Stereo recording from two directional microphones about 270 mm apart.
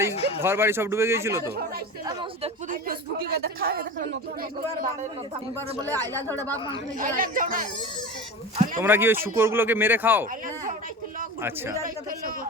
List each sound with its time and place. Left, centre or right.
0.0 s speech: centre
2.8 s a woman's voice: right
6.1 s speech: centre
7.0 s speech: right
8.8 s speech: centre